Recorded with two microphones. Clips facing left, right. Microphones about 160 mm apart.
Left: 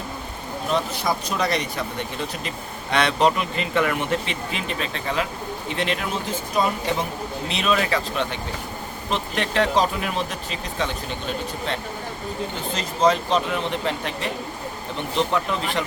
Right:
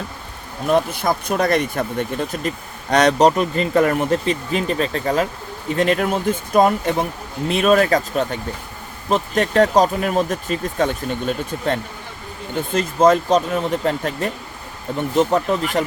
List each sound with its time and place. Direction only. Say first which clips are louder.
0.7 s speech: right 6 dB; 55° right (ahead or behind)